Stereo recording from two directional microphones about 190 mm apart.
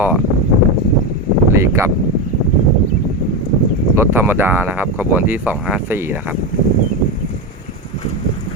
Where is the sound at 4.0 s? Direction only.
10° right (ahead or behind).